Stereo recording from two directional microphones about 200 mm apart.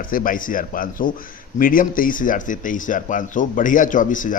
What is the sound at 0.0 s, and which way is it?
Speech, 45° left (ahead or behind).